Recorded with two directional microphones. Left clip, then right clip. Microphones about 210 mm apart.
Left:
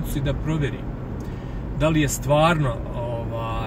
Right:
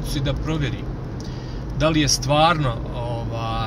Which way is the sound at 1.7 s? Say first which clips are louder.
Right 3 dB; 25° right (ahead or behind).